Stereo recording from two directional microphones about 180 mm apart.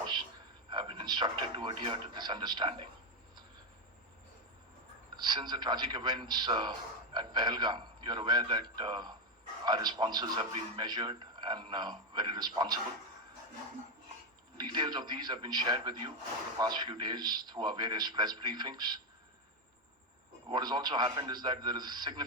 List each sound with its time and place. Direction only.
0.7 s speech: 25° right (ahead or behind)
5.1 s a man's voice: 25° right (ahead or behind)
14.6 s a man's voice: 25° right (ahead or behind)
20.5 s a man's voice: 25° right (ahead or behind)